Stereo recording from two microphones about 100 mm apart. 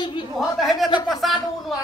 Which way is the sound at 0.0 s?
50° left (ahead or behind).